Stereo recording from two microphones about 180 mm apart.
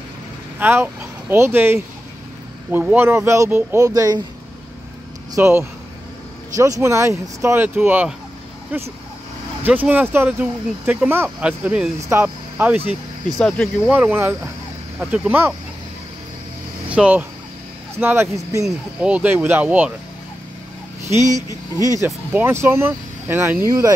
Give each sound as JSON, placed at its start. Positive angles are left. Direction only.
{"t": 0.6, "sound": "speech", "side_deg": -10}
{"t": 5.3, "sound": "speech", "side_deg": -15}
{"t": 13.4, "sound": "speech", "side_deg": 5}
{"t": 13.8, "sound": "speech", "side_deg": -5}
{"t": 16.9, "sound": "speech", "side_deg": -5}
{"t": 21.1, "sound": "speech", "side_deg": -15}